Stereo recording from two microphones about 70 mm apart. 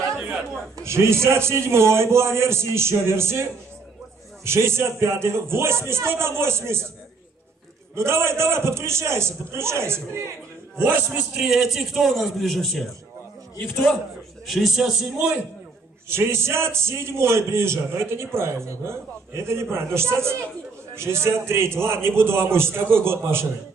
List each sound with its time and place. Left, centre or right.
0.8 s a man's voice: right
4.5 s a man's voice: right
7.9 s a man's voice: right
11.3 s speech: centre
14.5 s speech: centre
16.1 s a man's voice: right